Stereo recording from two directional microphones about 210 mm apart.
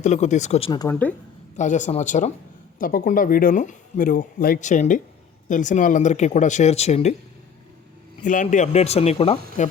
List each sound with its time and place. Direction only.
0.0 s speech: 35° left (ahead or behind)
0.7 s speech: 20° left (ahead or behind)
1.5 s speech: 35° left (ahead or behind)
8.2 s speech: 35° left (ahead or behind)